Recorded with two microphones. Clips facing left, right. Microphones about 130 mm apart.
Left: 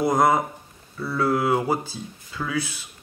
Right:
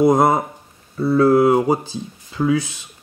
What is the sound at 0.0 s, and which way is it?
Speech, 25° right (ahead or behind).